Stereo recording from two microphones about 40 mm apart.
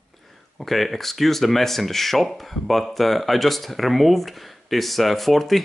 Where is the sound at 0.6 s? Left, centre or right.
Centre.